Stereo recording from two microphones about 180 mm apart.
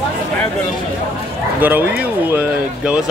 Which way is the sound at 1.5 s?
10° right (ahead or behind).